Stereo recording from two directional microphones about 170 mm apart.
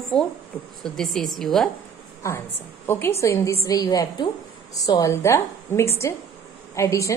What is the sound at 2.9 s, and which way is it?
A woman's voice, 15° left (ahead or behind).